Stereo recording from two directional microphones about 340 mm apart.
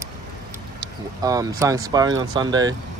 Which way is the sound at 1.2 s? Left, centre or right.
Centre.